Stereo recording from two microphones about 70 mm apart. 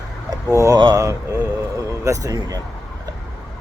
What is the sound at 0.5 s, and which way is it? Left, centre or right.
Speech, right.